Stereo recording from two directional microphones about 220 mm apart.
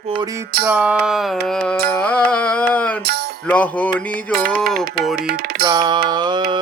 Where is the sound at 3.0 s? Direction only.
45° right (ahead or behind).